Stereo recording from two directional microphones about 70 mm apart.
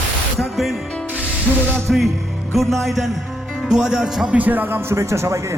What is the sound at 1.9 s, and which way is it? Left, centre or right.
A man's voice, centre.